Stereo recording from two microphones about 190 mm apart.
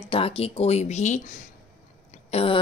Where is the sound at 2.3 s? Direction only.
30° left (ahead or behind).